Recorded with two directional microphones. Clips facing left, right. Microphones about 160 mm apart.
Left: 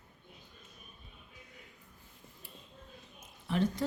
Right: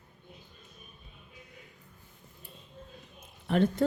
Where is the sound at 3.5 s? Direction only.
60° right (ahead or behind).